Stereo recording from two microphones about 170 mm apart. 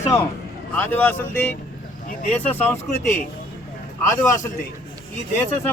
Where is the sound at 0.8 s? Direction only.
10° left (ahead or behind).